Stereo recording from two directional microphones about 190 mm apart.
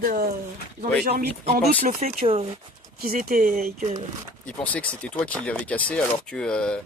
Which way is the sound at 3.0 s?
50° right (ahead or behind).